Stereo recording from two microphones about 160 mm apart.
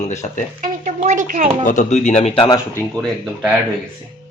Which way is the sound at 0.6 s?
50° right (ahead or behind).